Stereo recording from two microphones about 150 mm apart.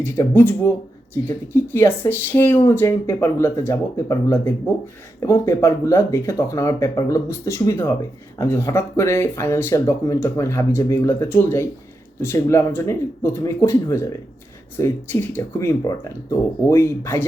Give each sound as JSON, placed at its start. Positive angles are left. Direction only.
{"t": 0.0, "sound": "speech", "side_deg": 15}